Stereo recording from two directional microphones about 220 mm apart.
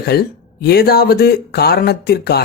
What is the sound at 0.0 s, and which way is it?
A woman's voice, 45° left (ahead or behind).